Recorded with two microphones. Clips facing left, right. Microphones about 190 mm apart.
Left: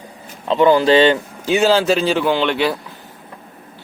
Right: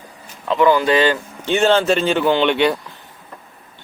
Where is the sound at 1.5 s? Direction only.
5° left (ahead or behind).